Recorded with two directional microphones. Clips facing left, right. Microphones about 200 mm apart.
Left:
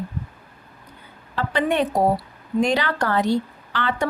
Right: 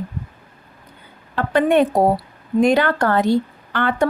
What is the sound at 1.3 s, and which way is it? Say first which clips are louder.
A woman's voice: right 6 dB; 55° right (ahead or behind).